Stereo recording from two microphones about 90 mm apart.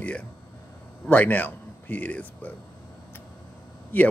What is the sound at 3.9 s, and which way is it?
Speech, 15° left (ahead or behind).